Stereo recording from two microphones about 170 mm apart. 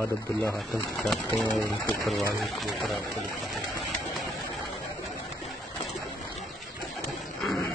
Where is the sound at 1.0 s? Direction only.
Centre (ahead or behind).